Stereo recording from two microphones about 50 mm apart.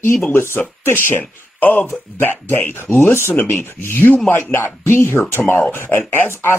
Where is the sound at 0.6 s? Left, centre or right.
Left.